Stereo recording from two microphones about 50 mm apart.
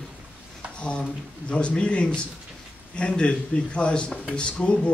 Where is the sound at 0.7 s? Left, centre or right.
Left.